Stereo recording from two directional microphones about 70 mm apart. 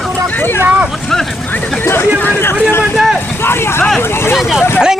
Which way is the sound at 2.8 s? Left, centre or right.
Centre.